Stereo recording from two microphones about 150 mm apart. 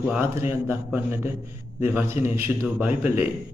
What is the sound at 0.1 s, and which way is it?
A man's voice, 15° right (ahead or behind).